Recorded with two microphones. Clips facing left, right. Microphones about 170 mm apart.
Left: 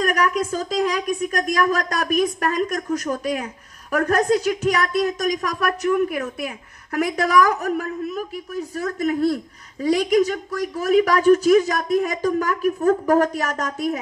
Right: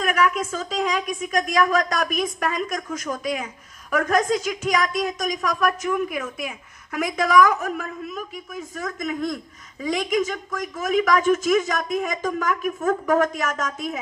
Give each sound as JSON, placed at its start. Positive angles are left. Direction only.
{"t": 0.0, "sound": "a woman's voice", "side_deg": 40}
{"t": 5.7, "sound": "speech", "side_deg": 40}